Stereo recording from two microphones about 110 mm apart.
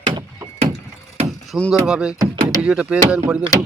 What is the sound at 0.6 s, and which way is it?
Wood, 80° right.